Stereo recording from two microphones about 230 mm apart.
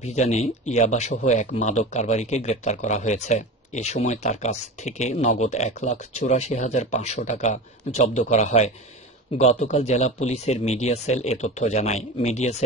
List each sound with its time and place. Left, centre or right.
0.0 s speech: left